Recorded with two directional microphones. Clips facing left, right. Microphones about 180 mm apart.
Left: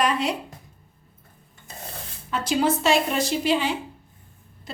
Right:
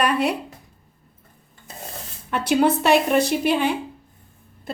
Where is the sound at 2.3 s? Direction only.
60° right (ahead or behind).